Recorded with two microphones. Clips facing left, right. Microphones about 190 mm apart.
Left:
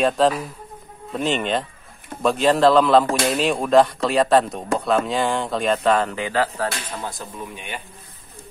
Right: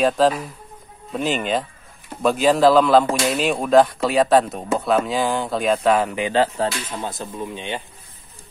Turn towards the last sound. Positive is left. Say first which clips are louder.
# right 5 dB
turn(degrees=-25)  # may be behind; listen again after turning